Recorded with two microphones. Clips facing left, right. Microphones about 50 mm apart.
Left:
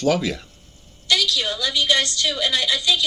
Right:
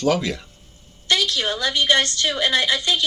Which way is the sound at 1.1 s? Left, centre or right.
Right.